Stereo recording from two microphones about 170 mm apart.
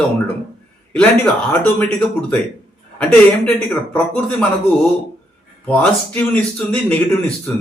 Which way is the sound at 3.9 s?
5° left (ahead or behind).